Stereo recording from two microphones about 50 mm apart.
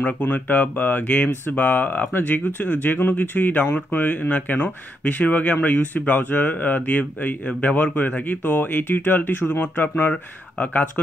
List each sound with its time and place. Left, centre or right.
0.0 s speech: left
1.0 s speech: left